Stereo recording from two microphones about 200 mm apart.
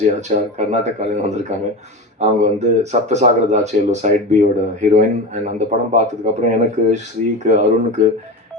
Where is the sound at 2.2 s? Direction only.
35° right (ahead or behind).